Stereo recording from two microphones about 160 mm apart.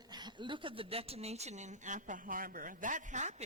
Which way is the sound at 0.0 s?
25° right (ahead or behind).